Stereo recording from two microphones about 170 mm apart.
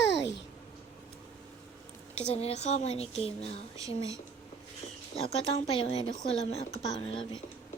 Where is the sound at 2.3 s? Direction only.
35° left (ahead or behind).